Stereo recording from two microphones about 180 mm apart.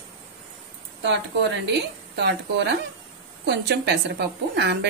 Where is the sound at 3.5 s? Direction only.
65° right (ahead or behind).